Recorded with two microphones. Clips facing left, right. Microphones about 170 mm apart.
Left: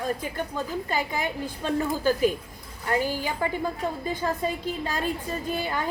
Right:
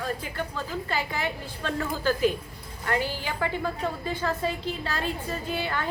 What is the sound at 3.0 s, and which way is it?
Speech, 45° left (ahead or behind).